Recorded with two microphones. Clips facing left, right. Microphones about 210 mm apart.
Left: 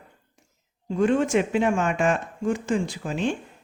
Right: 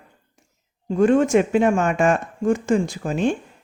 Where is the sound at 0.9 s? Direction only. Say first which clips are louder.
Right 5 dB; 45° right (ahead or behind).